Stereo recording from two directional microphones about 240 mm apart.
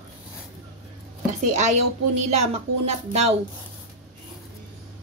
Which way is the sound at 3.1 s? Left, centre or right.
Right.